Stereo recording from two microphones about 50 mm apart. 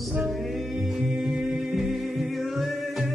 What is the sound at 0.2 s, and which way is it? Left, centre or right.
A capella, centre.